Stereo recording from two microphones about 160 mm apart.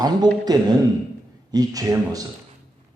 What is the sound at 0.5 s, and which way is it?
A man's voice, 25° right (ahead or behind).